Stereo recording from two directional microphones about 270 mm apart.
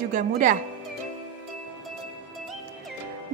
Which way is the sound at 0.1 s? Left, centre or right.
Right.